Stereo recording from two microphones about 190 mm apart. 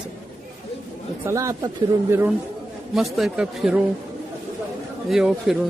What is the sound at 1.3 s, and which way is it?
Speech, 15° right (ahead or behind).